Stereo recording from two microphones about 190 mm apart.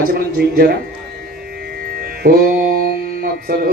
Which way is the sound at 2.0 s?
50° right (ahead or behind).